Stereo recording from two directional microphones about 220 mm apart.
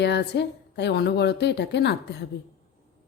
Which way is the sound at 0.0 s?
50° left (ahead or behind).